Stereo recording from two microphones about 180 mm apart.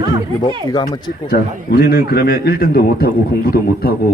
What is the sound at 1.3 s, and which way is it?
A man's voice, 55° left (ahead or behind).